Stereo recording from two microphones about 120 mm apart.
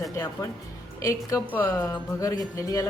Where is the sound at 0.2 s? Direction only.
25° left (ahead or behind).